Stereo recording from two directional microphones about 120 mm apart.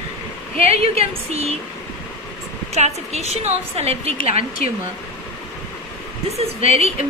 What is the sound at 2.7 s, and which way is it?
A woman's voice, 65° right (ahead or behind).